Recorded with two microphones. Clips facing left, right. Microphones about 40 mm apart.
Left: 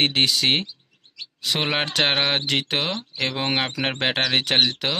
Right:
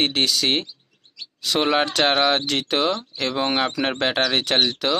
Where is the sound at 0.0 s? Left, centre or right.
Left.